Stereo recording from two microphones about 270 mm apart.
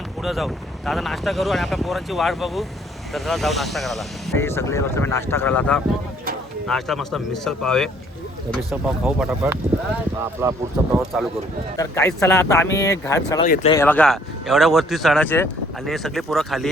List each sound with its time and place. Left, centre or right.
0.2 s speech: centre
11.8 s speech: centre
13.4 s speech: left
13.7 s speech: centre